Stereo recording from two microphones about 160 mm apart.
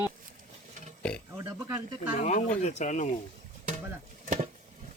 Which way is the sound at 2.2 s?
45° left (ahead or behind).